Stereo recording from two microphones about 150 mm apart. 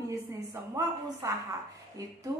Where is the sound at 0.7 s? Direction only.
20° right (ahead or behind).